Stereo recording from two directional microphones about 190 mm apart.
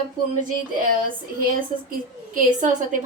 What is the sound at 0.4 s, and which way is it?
Speech, 45° right (ahead or behind).